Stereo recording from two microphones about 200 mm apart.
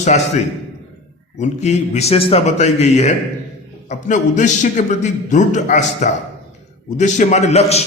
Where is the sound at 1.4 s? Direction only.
35° left (ahead or behind).